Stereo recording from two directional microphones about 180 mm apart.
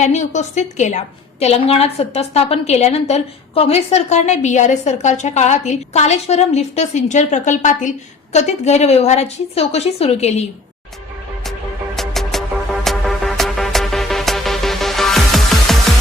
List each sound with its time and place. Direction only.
0.0 s a woman's voice: 40° left (ahead or behind)
11.9 s music: centre (ahead or behind)